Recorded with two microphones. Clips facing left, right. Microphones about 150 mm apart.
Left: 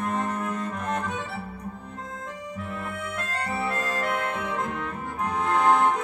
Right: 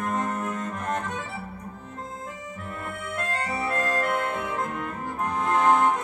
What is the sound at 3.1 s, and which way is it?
Organ, 45° right (ahead or behind).